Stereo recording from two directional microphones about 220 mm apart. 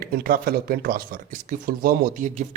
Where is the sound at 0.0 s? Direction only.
40° right (ahead or behind).